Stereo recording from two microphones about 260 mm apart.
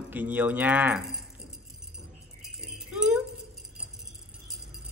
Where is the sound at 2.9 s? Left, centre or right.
Centre.